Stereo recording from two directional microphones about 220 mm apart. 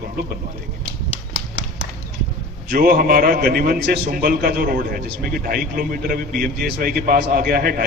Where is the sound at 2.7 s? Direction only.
40° right (ahead or behind).